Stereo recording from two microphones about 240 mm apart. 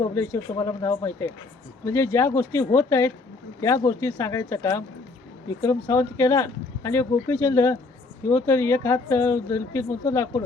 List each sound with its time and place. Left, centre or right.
0.1 s speech: centre